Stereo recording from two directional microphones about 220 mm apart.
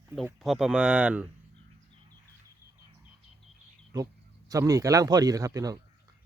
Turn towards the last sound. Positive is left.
turn(degrees=-15)  # may be behind; listen again after turning